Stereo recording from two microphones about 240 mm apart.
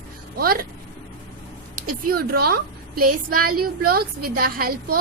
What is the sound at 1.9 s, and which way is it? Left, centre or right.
Speech, right.